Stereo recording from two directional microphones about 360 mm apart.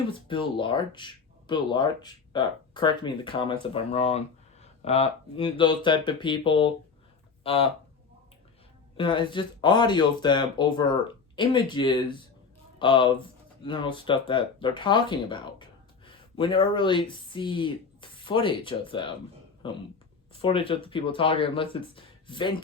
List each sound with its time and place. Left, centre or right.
0.1 s speech: centre
9.0 s speech: centre